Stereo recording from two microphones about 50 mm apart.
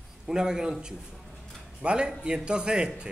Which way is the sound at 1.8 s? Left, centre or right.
Centre.